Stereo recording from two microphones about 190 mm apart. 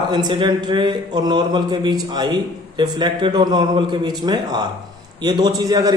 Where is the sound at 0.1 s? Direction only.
20° right (ahead or behind).